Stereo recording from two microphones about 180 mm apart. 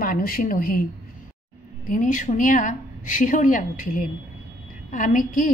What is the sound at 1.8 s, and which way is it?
A woman's voice, 45° left (ahead or behind).